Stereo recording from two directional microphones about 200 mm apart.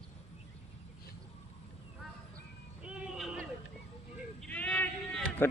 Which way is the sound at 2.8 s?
5° right (ahead or behind).